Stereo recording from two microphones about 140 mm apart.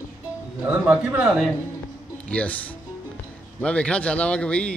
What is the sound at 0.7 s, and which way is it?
Speech, 10° right (ahead or behind).